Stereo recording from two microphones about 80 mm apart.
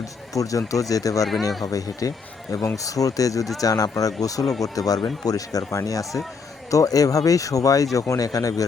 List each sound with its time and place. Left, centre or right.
0.0 s speech: left
1.2 s speech: centre
1.6 s speech: left